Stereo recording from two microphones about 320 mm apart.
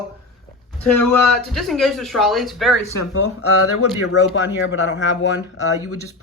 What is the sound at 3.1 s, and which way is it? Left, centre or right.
Speech, left.